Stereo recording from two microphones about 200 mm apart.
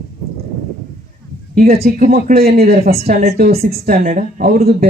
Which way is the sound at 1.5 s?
50° right (ahead or behind).